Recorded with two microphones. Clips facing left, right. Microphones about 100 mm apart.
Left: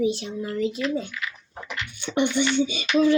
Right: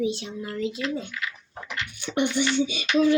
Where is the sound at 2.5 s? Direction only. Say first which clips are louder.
Left 1 dB; centre (ahead or behind).